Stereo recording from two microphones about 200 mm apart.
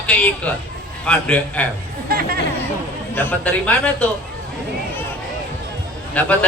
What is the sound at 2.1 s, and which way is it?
Speech, 45° right (ahead or behind).